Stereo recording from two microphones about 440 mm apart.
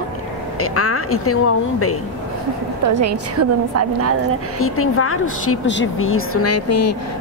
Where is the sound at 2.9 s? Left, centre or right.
Right.